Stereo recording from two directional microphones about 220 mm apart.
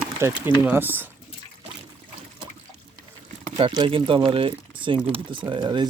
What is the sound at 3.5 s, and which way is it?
Speech, 20° right (ahead or behind).